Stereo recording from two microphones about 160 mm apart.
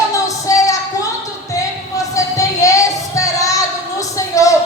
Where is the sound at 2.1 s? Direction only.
20° left (ahead or behind).